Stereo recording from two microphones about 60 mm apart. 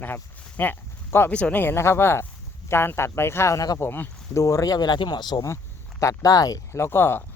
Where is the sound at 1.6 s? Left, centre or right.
Left.